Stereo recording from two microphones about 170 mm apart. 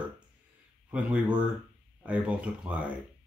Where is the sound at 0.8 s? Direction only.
5° right (ahead or behind).